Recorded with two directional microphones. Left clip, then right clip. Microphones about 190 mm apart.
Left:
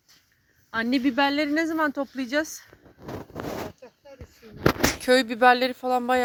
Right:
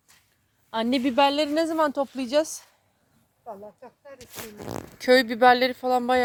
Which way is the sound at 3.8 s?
35° left (ahead or behind).